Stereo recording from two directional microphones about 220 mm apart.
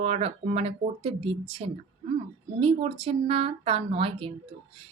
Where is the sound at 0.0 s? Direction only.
30° right (ahead or behind).